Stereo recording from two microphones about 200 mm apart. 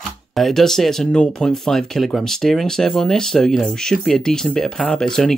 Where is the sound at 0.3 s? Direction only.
Centre (ahead or behind).